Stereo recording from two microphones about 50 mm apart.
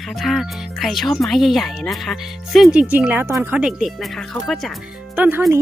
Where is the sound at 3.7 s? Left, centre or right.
Centre.